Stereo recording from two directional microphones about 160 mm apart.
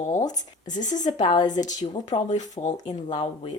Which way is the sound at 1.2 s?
30° left (ahead or behind).